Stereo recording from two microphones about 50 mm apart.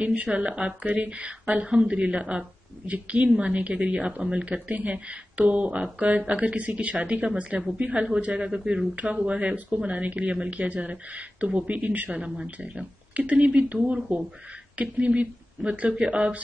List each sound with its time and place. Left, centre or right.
0.0 s a woman's voice: right
8.9 s a woman's voice: right